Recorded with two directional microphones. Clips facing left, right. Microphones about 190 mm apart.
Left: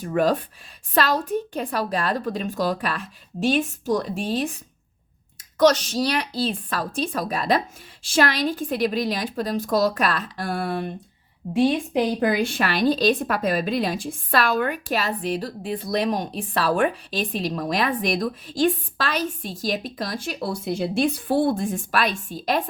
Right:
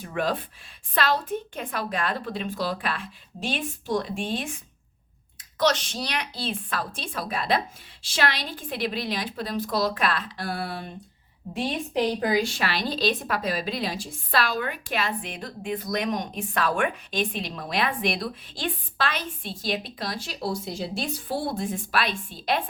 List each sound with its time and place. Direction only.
0.0 s a woman's voice: 40° left (ahead or behind)
12.2 s speech: 60° left (ahead or behind); by 22.6 s 40° left (ahead or behind)